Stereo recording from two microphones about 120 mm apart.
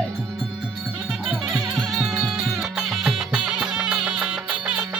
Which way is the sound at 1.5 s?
30° right (ahead or behind).